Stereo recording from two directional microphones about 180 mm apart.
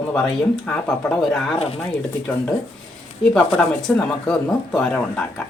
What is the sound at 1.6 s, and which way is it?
Speech, 30° left (ahead or behind).